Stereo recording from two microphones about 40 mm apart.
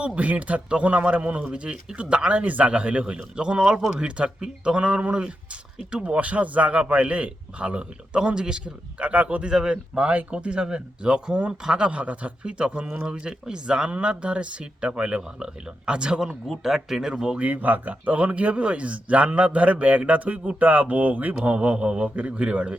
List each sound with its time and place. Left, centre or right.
0.2 s a man's voice: right; by 11.9 s centre
11.9 s a man's voice: right
16.5 s speech: centre
17.1 s a man's voice: right
17.3 s a man's voice: right
21.4 s a man's voice: right